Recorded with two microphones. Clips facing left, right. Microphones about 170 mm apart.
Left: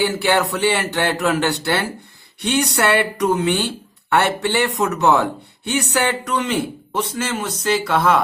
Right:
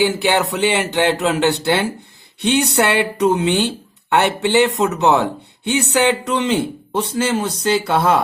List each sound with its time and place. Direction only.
0.0 s speech: 20° right (ahead or behind)